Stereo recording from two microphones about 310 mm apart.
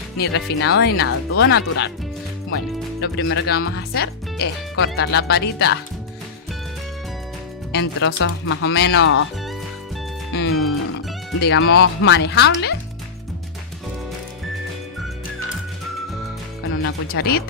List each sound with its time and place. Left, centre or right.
0.2 s speech: left
3.0 s speech: left
7.7 s speech: left
10.3 s speech: left
16.7 s speech: left